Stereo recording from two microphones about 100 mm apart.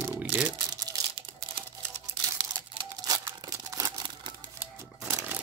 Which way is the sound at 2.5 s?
40° right (ahead or behind).